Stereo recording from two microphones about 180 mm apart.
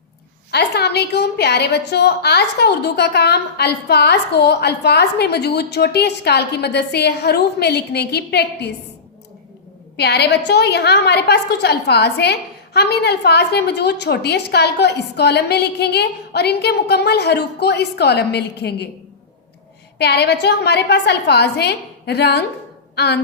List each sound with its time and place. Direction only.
0.5 s a woman's voice: 65° left (ahead or behind)
10.0 s a woman's voice: 65° left (ahead or behind)
20.0 s a woman's voice: 65° left (ahead or behind)